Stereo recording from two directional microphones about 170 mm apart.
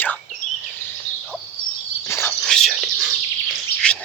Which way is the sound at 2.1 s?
15° left (ahead or behind).